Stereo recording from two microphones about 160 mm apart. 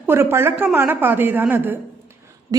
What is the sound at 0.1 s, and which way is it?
A woman's voice, 15° right (ahead or behind).